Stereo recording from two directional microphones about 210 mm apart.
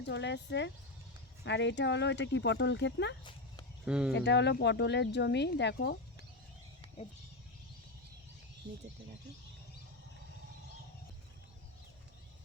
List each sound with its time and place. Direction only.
0.0 s speech: 55° left (ahead or behind)
3.8 s speech: 5° right (ahead or behind)
4.1 s speech: 55° left (ahead or behind)